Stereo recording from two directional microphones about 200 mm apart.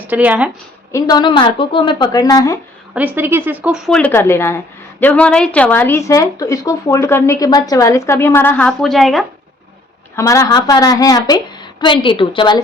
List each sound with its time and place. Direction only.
0.1 s speech: 10° right (ahead or behind)
0.9 s a woman's voice: 20° left (ahead or behind)
2.9 s speech: 10° right (ahead or behind)
10.2 s a woman's voice: 15° left (ahead or behind)